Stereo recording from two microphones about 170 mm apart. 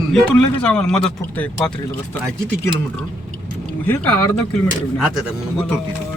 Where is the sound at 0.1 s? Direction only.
5° left (ahead or behind).